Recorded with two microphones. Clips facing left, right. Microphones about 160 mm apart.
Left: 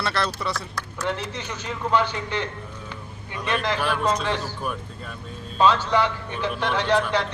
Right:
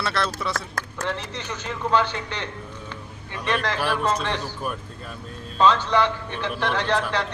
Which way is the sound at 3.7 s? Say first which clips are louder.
Even; 5° right (ahead or behind).